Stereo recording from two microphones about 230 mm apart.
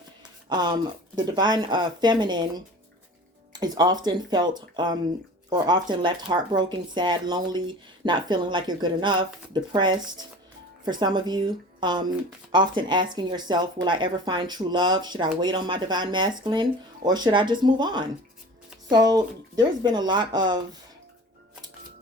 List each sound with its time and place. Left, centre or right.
0.4 s speech: centre
3.5 s speech: centre